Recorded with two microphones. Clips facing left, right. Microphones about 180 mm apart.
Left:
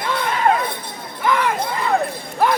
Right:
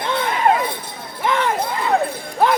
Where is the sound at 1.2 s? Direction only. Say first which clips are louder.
Left 1 dB; 25° right (ahead or behind).